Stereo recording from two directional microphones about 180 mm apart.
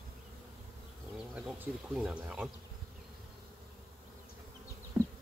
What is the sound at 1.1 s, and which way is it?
Speech, 5° right (ahead or behind).